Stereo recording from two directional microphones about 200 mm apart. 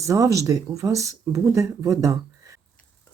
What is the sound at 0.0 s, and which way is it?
Speech, 15° right (ahead or behind).